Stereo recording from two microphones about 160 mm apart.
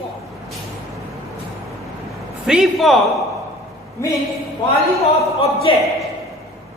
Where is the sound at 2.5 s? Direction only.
Centre (ahead or behind).